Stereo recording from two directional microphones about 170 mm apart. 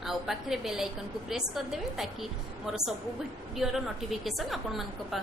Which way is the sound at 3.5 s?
Centre (ahead or behind).